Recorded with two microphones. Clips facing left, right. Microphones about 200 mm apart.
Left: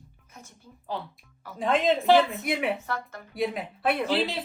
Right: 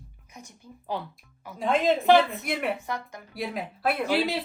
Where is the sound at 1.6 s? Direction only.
Centre (ahead or behind).